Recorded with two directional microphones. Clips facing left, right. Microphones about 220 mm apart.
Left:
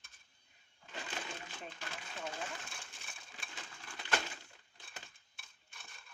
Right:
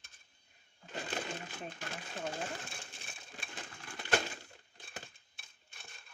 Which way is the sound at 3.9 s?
40° right (ahead or behind).